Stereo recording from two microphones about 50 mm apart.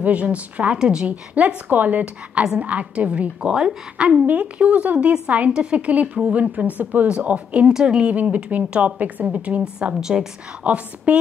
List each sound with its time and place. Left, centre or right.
0.0 s a woman's voice: right
4.3 s a woman's voice: right
7.1 s a woman's voice: right
9.8 s a woman's voice: centre
10.6 s a woman's voice: right